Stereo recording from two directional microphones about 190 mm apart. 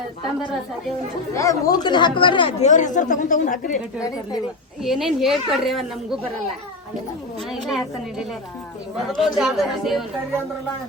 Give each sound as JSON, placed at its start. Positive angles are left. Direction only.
{"t": 1.3, "sound": "speech", "side_deg": 15}
{"t": 4.8, "sound": "a woman's voice", "side_deg": 0}
{"t": 7.5, "sound": "a woman's voice", "side_deg": 0}